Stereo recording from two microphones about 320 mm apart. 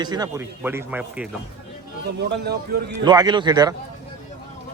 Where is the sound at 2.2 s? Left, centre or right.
Right.